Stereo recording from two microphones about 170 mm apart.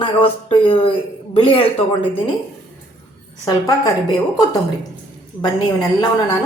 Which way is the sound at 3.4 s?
20° left (ahead or behind).